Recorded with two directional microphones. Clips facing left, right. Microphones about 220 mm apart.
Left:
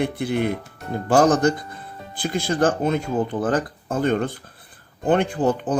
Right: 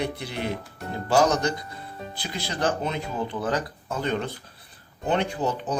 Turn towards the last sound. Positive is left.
turn(degrees=50)  # may be behind; listen again after turning